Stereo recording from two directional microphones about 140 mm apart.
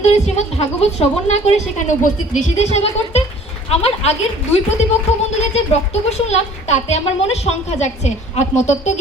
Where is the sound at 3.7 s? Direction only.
45° left (ahead or behind).